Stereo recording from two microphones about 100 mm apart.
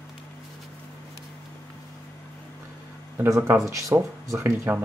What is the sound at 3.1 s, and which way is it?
Speech, 25° right (ahead or behind).